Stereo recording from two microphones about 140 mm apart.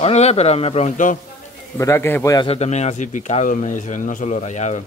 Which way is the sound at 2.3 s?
40° left (ahead or behind).